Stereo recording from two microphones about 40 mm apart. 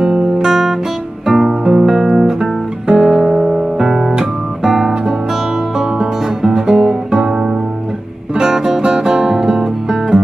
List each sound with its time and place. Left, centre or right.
0.0 s guitar: centre
3.1 s music: centre
3.7 s guitar: centre
5.8 s music: centre
7.1 s guitar: centre
8.4 s music: centre